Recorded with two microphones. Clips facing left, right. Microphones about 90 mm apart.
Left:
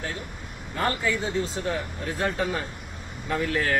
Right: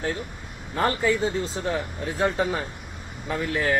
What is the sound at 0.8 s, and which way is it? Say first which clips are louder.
Speech: right 4 dB; 35° right (ahead or behind).